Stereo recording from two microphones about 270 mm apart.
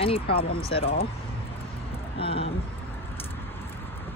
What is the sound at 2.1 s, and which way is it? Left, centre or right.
Speech, left.